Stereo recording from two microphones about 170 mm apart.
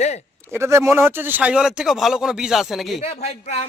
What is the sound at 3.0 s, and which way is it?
Speech, 35° left (ahead or behind).